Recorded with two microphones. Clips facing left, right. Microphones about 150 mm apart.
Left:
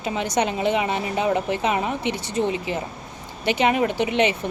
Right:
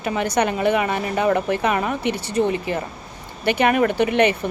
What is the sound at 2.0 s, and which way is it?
A woman's voice, 60° right (ahead or behind).